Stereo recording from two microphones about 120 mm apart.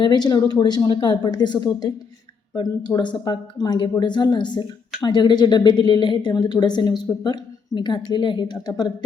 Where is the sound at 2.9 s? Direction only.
40° left (ahead or behind).